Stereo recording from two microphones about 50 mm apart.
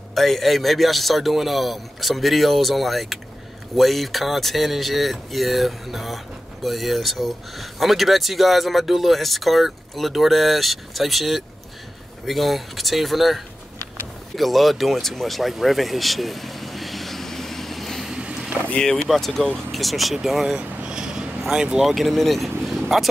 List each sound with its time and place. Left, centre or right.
0.1 s speech: centre
15.5 s vehicle: centre
18.0 s boat: centre
19.0 s speech: centre
20.5 s a sound: centre
21.4 s speech: centre
21.8 s speech: centre